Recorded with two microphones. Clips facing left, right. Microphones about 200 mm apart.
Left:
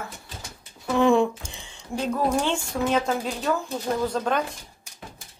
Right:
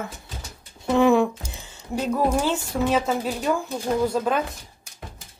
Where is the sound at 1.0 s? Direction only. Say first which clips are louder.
Right 1 dB; 5° right (ahead or behind).